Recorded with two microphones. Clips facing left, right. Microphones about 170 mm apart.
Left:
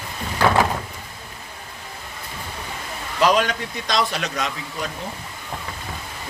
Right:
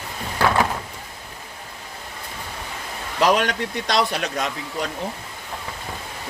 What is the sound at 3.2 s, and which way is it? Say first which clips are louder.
Speech: even; 70° right (ahead or behind).